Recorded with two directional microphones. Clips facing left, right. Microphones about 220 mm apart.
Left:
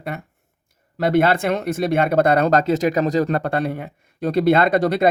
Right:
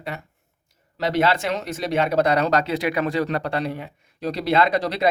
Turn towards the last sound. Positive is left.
turn(degrees=50)  # may be behind; listen again after turning